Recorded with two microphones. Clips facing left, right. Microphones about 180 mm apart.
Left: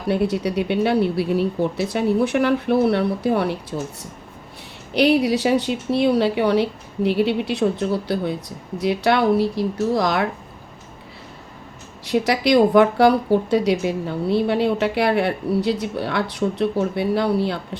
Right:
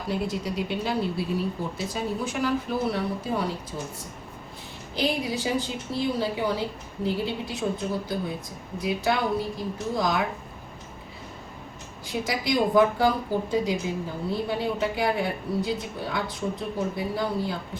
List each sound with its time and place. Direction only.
0.1 s speech: 65° left (ahead or behind)
4.9 s speech: 70° left (ahead or behind)
12.0 s speech: 75° left (ahead or behind)